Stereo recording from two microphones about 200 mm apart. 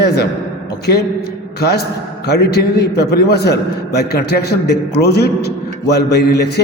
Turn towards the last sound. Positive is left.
turn(degrees=55)  # may be behind; listen again after turning